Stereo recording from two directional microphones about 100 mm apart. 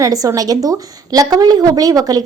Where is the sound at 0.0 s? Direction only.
35° right (ahead or behind).